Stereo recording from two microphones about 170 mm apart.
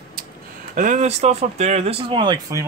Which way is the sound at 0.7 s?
45° right (ahead or behind).